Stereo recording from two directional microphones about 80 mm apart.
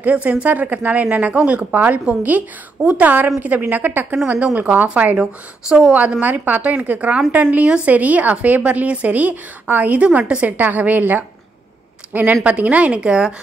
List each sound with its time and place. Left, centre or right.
0.0 s a woman's voice: centre
5.7 s speech: centre
5.9 s a woman's voice: centre